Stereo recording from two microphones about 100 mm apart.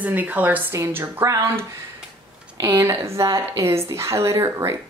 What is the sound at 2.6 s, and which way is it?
Speech, 30° right (ahead or behind).